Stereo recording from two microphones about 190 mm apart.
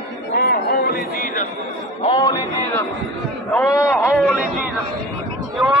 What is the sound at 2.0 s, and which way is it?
Speech, 25° left (ahead or behind).